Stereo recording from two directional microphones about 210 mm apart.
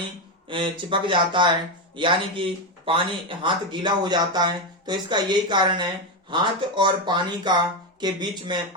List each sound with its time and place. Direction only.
0.4 s speech: 25° right (ahead or behind)